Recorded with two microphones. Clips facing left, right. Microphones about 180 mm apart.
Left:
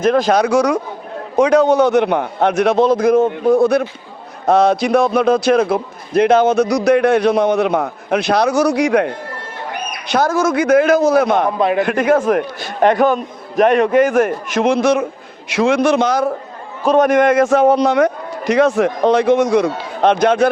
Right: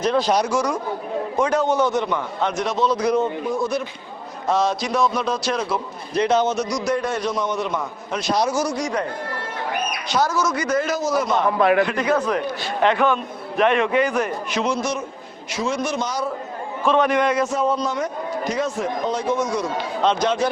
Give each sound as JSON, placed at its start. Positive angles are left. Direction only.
{"t": 0.0, "sound": "a man's voice", "side_deg": 50}
{"t": 0.3, "sound": "a man's voice", "side_deg": 65}
{"t": 10.1, "sound": "a man's voice", "side_deg": 55}
{"t": 11.5, "sound": "a man's voice", "side_deg": 20}
{"t": 11.8, "sound": "a man's voice", "side_deg": 50}
{"t": 16.8, "sound": "a man's voice", "side_deg": 40}
{"t": 17.5, "sound": "a man's voice", "side_deg": 70}